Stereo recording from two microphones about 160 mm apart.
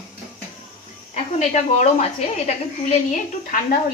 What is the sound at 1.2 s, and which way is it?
A woman's voice, 45° left (ahead or behind).